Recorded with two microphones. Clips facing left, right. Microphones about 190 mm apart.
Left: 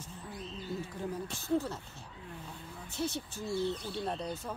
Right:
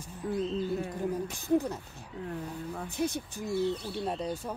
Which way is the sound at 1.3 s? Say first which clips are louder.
Right 3 dB; 15° right (ahead or behind).